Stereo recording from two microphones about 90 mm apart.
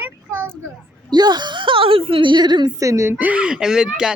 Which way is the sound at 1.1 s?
50° right (ahead or behind).